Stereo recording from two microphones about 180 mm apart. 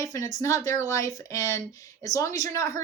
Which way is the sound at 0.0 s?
20° left (ahead or behind).